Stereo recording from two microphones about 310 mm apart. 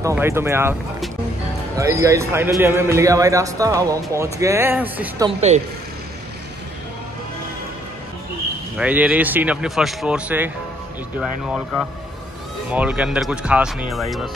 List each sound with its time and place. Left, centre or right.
0.0 s a man's voice: centre
8.7 s speech: centre